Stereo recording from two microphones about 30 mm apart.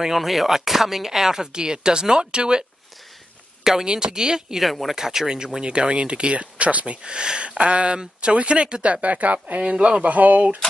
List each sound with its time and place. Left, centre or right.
0.2 s speech: centre; by 2.6 s right
3.8 s speech: right
4.6 s speech: centre
4.9 s speech: centre
5.6 s speech: right
7.0 s speech: right
9.0 s speech: right
9.7 s speech: right
10.0 s speech: right